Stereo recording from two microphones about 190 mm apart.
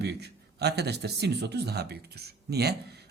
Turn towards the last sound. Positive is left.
turn(degrees=-60)  # may be behind; listen again after turning